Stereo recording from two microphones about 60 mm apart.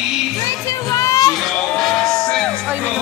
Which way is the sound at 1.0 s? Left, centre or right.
Left.